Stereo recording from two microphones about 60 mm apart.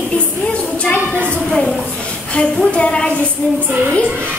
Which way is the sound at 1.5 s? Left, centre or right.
Centre.